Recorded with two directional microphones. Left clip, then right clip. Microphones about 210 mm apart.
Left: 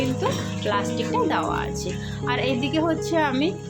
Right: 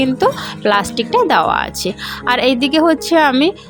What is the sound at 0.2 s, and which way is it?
Speech, 50° right (ahead or behind).